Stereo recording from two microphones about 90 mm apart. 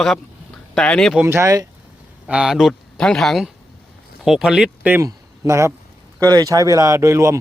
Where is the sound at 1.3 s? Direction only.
35° right (ahead or behind).